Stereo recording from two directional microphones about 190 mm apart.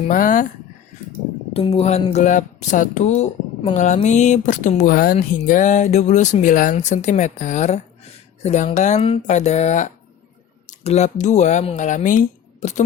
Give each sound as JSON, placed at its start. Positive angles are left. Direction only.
{"t": 0.1, "sound": "speech", "side_deg": 45}
{"t": 1.5, "sound": "speech", "side_deg": 30}